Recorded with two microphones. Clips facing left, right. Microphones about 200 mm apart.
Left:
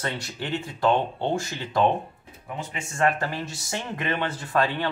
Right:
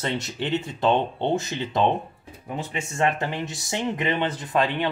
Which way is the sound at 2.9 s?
20° right (ahead or behind).